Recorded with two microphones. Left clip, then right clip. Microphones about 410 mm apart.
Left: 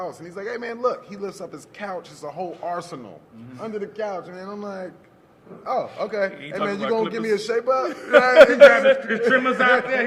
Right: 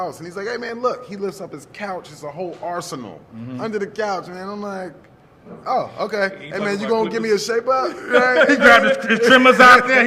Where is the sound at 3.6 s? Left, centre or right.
Centre.